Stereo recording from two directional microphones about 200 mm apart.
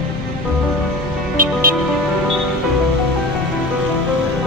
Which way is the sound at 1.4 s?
45° right (ahead or behind).